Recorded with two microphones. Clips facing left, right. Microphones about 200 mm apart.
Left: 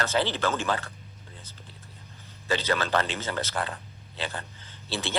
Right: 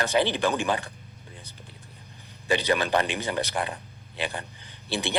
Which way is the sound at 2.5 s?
15° right (ahead or behind).